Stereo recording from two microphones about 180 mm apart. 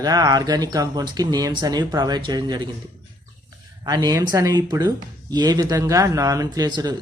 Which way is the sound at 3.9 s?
20° right (ahead or behind).